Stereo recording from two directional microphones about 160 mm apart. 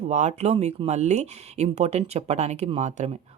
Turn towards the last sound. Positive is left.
turn(degrees=-45)  # may be behind; listen again after turning